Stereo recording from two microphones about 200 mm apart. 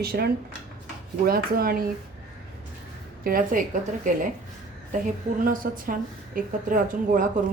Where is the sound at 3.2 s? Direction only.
45° right (ahead or behind).